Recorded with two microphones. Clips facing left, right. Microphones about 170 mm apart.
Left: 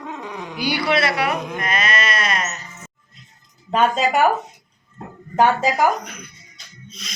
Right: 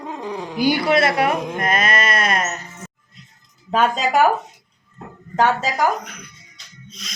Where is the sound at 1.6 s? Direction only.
50° right (ahead or behind).